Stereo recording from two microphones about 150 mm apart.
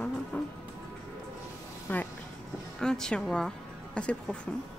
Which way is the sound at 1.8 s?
10° left (ahead or behind).